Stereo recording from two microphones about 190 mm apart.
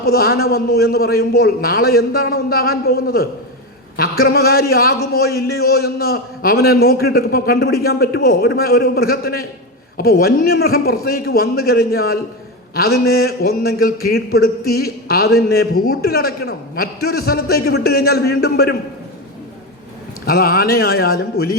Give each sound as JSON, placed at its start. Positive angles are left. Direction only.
{"t": 0.0, "sound": "a man's voice", "side_deg": 55}
{"t": 16.0, "sound": "a man's voice", "side_deg": 55}
{"t": 20.2, "sound": "a man's voice", "side_deg": 50}